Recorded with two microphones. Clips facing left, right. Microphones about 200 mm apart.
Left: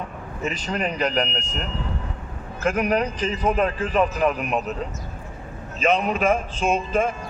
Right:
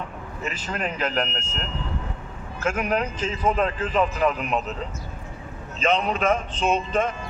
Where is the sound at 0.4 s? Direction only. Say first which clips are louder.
Left 4 dB; 15° left (ahead or behind).